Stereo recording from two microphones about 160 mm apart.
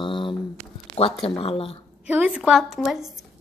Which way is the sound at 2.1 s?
5° right (ahead or behind).